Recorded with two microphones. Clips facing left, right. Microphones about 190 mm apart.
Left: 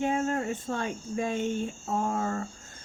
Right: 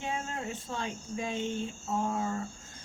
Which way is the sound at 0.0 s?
50° left (ahead or behind).